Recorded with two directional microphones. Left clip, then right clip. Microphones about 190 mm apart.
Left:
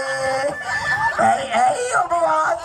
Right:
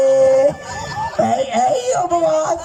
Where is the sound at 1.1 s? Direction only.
20° right (ahead or behind).